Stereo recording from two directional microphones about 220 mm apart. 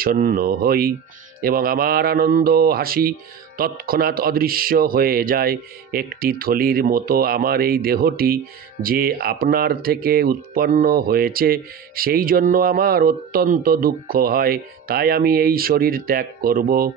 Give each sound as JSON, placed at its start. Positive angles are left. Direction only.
{"t": 0.0, "sound": "speech", "side_deg": -40}